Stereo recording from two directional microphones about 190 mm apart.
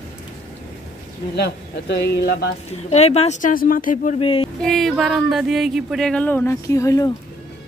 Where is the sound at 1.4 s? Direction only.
60° left (ahead or behind).